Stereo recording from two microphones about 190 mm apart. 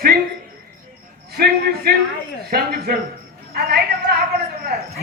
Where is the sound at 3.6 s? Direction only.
55° right (ahead or behind).